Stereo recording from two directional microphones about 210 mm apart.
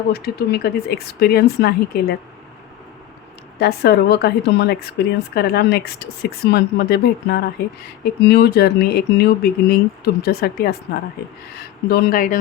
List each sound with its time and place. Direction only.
0.1 s a woman's voice: 50° left (ahead or behind)
3.6 s a woman's voice: 50° left (ahead or behind)